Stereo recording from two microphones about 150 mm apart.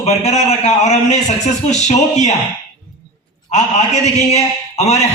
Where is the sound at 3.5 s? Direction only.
50° left (ahead or behind).